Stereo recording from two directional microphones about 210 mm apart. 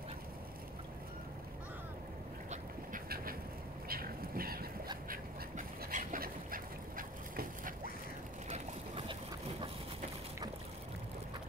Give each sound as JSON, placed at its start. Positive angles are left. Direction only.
{"t": 2.5, "sound": "duck", "side_deg": -40}
{"t": 3.9, "sound": "a sound", "side_deg": -45}
{"t": 5.1, "sound": "duck", "side_deg": -40}
{"t": 8.5, "sound": "boat", "side_deg": -30}